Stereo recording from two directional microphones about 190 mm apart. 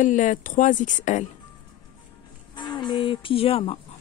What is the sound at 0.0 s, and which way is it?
Speech, 40° left (ahead or behind).